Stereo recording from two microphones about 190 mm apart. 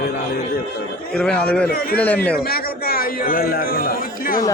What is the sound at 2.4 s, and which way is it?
A man's voice, 50° left (ahead or behind).